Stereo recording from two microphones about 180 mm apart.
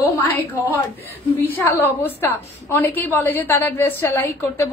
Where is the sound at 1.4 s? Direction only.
10° left (ahead or behind).